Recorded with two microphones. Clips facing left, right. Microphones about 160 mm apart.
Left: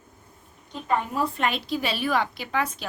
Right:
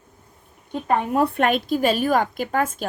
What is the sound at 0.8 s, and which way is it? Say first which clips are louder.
A woman's voice: right 5 dB; 60° right (ahead or behind).